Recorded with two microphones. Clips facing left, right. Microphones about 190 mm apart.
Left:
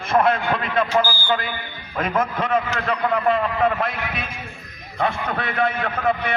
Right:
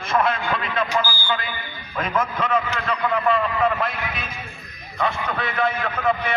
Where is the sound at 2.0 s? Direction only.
55° left (ahead or behind).